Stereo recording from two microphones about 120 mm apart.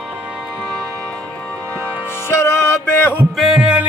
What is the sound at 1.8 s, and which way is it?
Music, 15° right (ahead or behind).